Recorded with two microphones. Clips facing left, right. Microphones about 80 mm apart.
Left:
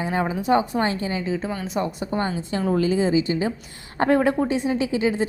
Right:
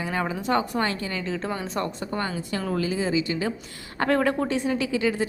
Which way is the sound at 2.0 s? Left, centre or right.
Left.